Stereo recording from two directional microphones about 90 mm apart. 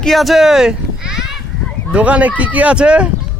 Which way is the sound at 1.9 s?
15° right (ahead or behind).